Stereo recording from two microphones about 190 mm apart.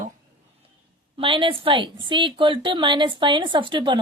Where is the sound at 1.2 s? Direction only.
25° right (ahead or behind).